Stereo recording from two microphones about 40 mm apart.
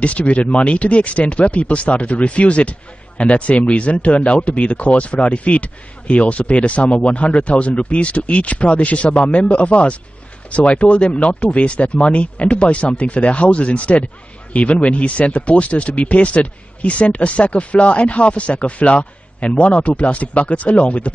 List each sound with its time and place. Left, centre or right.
0.0 s speech: left